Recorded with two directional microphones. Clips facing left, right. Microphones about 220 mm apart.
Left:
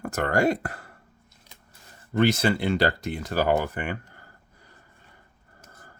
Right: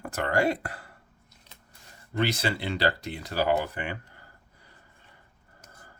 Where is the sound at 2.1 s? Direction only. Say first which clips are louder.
Left 6 dB; 45° left (ahead or behind).